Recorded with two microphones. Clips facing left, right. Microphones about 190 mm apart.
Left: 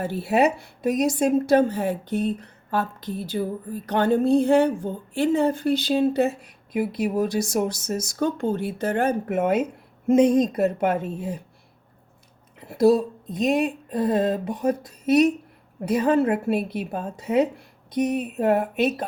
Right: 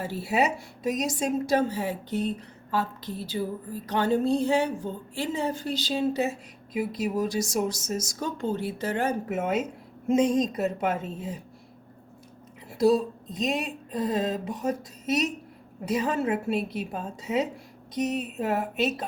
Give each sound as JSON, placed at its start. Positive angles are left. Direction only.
{"t": 0.0, "sound": "a woman's voice", "side_deg": 55}
{"t": 12.6, "sound": "a woman's voice", "side_deg": 60}